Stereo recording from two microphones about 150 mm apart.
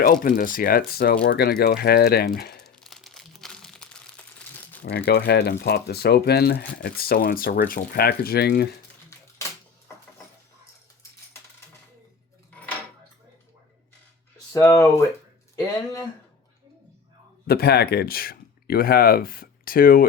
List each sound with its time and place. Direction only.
0.0 s speech: 70° left (ahead or behind); by 2.6 s 90° left
2.6 s crumpling: centre (ahead or behind)
4.9 s speech: 90° left
14.5 s speech: 15° left (ahead or behind)
17.4 s speech: 90° left; by 20.1 s 70° left (ahead or behind)